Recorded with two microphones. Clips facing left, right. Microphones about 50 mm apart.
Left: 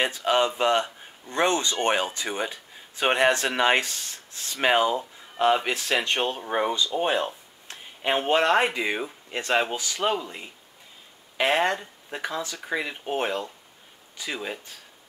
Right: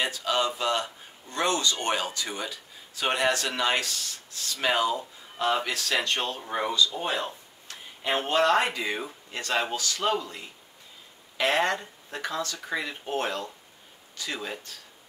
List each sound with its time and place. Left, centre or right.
0.0 s speech: left; by 14.7 s centre